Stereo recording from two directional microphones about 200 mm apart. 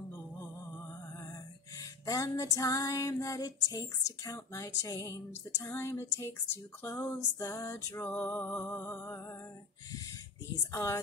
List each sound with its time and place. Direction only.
2.0 s female singing: 15° left (ahead or behind)
10.7 s female singing: 15° left (ahead or behind)